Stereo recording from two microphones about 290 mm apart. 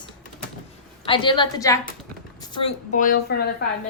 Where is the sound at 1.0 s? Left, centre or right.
Centre; by 3.8 s left.